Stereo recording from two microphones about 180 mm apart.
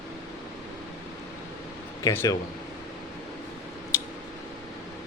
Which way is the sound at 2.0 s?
20° left (ahead or behind).